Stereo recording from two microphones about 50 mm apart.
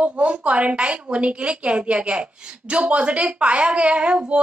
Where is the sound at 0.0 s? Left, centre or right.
Right.